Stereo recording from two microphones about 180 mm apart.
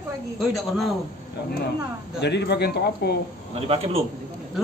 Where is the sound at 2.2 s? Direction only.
70° left (ahead or behind).